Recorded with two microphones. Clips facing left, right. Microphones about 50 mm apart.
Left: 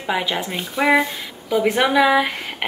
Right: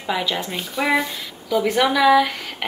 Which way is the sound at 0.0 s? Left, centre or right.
Centre.